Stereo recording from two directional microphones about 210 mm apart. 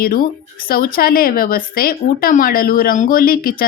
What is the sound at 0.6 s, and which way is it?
Speech, 45° left (ahead or behind).